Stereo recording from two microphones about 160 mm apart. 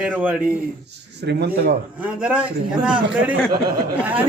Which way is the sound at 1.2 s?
90° right.